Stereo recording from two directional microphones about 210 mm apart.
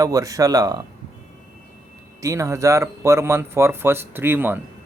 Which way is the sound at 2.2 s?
15° right (ahead or behind).